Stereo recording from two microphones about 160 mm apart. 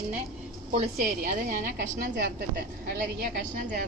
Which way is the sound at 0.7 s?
45° right (ahead or behind).